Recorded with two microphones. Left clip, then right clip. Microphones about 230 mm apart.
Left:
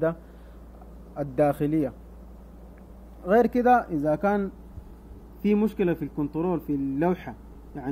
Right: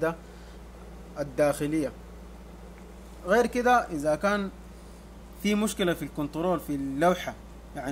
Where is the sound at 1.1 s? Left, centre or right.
Centre.